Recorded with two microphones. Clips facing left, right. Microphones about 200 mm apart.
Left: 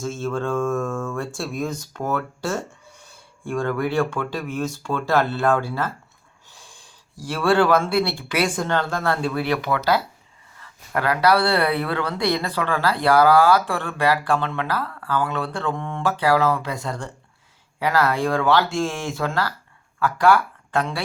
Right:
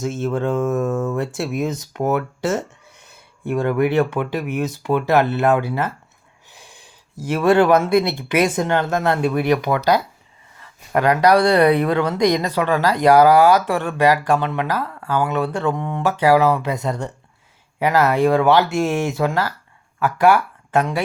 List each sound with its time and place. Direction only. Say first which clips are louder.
0.0 s speech: right 4 dB; 20° right (ahead or behind)